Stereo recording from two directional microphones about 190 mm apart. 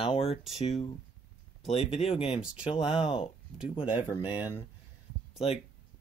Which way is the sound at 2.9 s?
30° left (ahead or behind).